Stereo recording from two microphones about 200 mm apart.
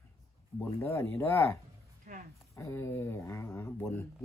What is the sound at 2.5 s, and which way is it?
Speech, 15° left (ahead or behind).